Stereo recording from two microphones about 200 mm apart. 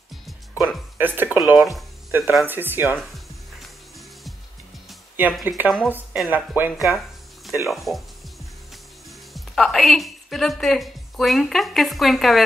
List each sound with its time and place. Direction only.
0.9 s speech: 10° right (ahead or behind)
2.0 s speech: 15° right (ahead or behind)
5.1 s speech: 10° right (ahead or behind)
9.3 s a woman's voice: centre (ahead or behind)